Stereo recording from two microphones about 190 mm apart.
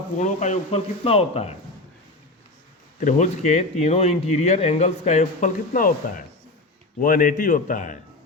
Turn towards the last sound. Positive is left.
turn(degrees=45)  # may be behind; listen again after turning